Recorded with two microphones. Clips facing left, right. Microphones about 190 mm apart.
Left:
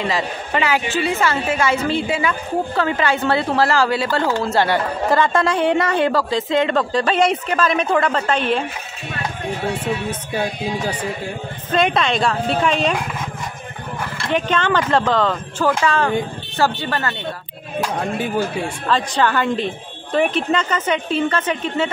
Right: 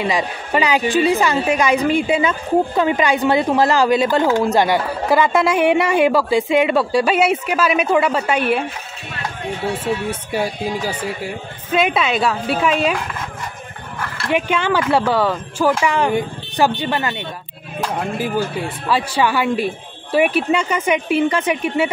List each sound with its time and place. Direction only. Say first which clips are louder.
0.0 s a woman's voice: right 2 dB; 15° right (ahead or behind)
10.3 s a woman's voice: right 1 dB; 10° right (ahead or behind)
14.1 s a woman's voice: right 1 dB; 10° right (ahead or behind)
17.8 s a woman's voice: right 1 dB; 5° right (ahead or behind)